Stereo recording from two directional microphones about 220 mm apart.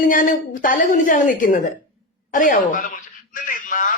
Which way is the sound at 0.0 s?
35° left (ahead or behind).